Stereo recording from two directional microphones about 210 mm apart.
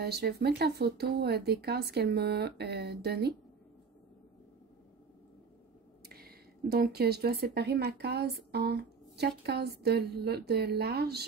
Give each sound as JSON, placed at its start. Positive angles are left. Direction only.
{"t": 0.0, "sound": "speech", "side_deg": -50}
{"t": 6.0, "sound": "speech", "side_deg": -45}